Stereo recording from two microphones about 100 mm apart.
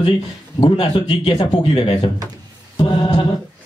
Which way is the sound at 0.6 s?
60° left (ahead or behind).